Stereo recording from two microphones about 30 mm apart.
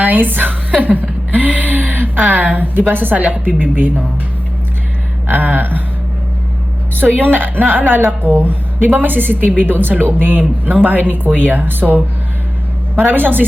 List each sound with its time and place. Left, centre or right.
0.0 s speech: right
0.8 s a sound: right
1.3 s speech: right
5.3 s a sound: right
6.9 s a woman's voice: right
13.1 s a woman's voice: right